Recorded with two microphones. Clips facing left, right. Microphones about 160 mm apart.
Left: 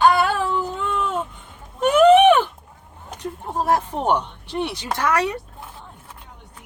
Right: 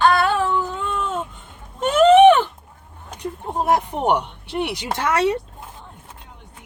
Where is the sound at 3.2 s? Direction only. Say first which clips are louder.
Right 1 dB; 15° right (ahead or behind).